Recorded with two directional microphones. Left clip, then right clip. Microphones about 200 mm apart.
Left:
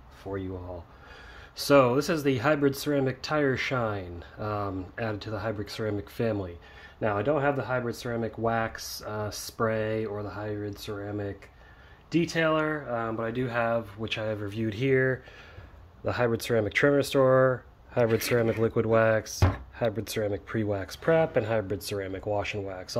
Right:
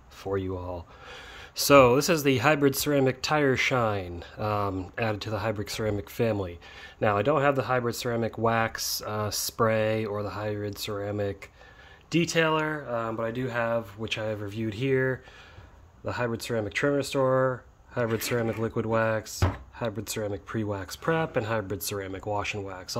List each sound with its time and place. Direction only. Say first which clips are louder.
0.2 s speech: right 5 dB; 50° right (ahead or behind)
1.6 s speech: right 3 dB; 35° right (ahead or behind)
12.5 s speech: even; 20° right (ahead or behind)